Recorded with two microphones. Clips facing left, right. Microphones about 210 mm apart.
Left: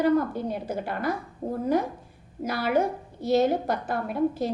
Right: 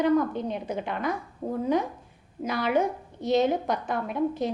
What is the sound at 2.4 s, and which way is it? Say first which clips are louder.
A woman's voice: even; 5° left (ahead or behind).